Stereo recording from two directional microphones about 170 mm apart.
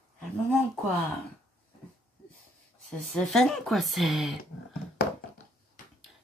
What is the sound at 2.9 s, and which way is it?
Speech, 5° left (ahead or behind).